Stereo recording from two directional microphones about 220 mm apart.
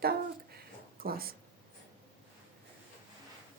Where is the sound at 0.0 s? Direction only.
45° right (ahead or behind).